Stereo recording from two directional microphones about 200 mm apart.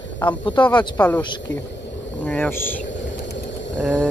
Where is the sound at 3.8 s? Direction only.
5° left (ahead or behind).